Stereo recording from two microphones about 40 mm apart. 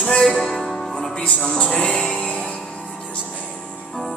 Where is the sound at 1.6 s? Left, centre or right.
Left.